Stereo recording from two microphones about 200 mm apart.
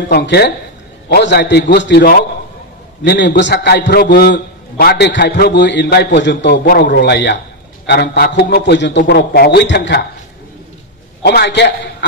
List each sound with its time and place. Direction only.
0.1 s a man's voice: 55° left (ahead or behind)
11.2 s a man's voice: 60° left (ahead or behind)